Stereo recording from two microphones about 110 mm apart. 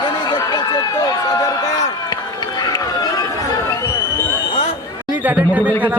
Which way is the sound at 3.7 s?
30° left (ahead or behind).